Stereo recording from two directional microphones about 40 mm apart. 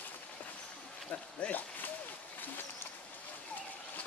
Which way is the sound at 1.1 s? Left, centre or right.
Left.